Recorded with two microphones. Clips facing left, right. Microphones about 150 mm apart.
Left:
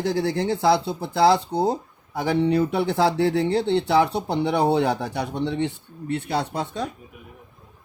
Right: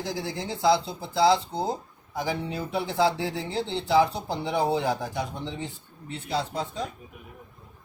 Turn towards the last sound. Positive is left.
turn(degrees=65)  # may be behind; listen again after turning